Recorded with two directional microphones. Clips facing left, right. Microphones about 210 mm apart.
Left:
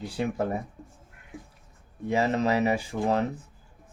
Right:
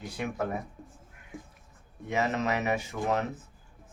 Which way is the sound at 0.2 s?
30° left (ahead or behind).